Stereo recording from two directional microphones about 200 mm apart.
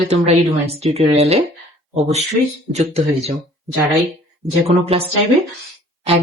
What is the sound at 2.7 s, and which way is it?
Speech, 35° right (ahead or behind).